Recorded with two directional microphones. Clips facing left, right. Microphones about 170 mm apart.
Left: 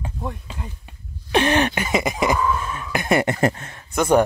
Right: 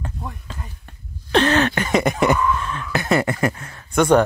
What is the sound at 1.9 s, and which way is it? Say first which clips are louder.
Speech: right 3 dB; 5° left (ahead or behind).